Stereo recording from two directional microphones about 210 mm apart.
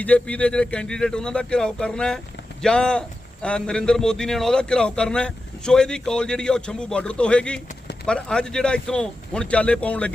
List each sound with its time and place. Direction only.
0.0 s a man's voice: 5° left (ahead or behind)